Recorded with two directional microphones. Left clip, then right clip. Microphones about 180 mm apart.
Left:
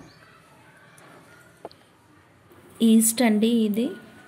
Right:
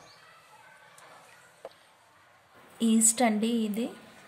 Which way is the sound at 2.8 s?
10° left (ahead or behind).